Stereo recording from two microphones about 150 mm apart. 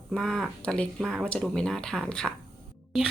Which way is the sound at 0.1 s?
Centre (ahead or behind).